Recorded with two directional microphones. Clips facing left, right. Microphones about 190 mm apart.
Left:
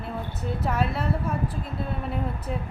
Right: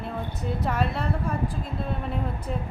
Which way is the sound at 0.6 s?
5° left (ahead or behind).